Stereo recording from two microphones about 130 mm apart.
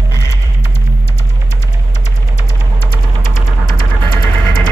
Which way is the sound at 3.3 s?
35° left (ahead or behind).